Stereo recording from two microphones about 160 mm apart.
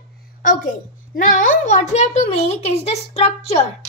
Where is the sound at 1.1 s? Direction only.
55° left (ahead or behind).